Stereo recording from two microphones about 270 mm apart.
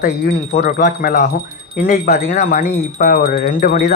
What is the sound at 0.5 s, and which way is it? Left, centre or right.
A man's voice, left.